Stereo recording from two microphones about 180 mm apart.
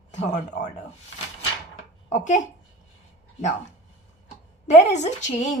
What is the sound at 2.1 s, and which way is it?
Speech, 45° left (ahead or behind).